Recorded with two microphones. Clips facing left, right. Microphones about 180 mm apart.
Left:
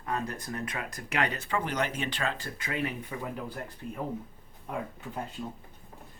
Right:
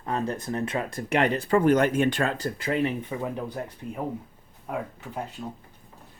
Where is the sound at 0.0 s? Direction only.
25° right (ahead or behind).